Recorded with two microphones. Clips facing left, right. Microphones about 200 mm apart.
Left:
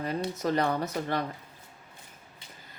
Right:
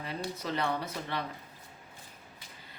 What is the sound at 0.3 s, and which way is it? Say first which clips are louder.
Speech: left 5 dB; 45° left (ahead or behind).